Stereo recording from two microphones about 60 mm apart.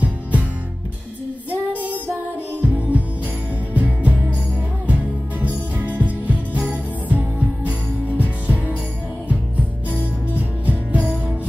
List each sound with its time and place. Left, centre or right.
0.0 s music: right
1.9 s music: right
5.9 s music: right
9.8 s music: right